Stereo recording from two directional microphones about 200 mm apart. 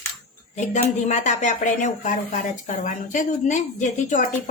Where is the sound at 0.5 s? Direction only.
35° left (ahead or behind).